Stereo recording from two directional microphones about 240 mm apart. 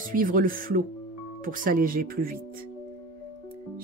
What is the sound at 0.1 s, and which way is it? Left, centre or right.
Speech, right.